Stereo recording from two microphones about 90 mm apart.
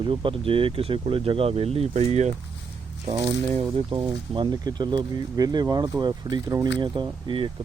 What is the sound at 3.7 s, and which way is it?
Speech, 70° right (ahead or behind).